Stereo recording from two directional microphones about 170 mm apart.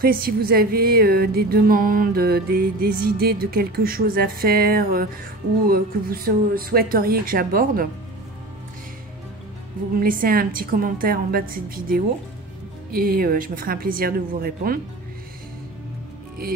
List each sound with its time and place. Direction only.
0.0 s music: 60° right (ahead or behind)
9.9 s music: 55° right (ahead or behind)